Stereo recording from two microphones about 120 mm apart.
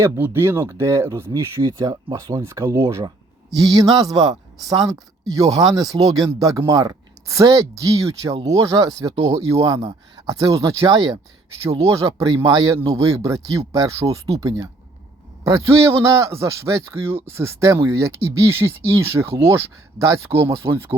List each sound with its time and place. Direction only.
0.0 s speech: 20° right (ahead or behind)
2.2 s speech: 25° right (ahead or behind)